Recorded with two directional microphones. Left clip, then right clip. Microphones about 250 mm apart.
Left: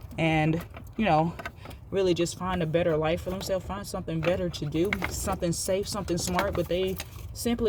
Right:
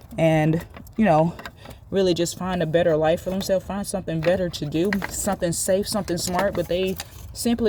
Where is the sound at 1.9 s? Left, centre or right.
Right.